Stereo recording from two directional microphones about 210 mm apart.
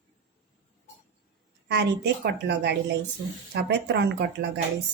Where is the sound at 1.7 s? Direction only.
55° right (ahead or behind).